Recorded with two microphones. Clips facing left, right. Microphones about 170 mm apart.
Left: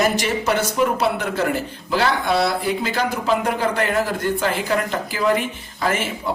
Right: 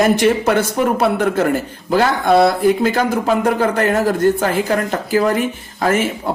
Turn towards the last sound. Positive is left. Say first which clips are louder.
# right 6 dB
turn(degrees=-50)  # may be behind; listen again after turning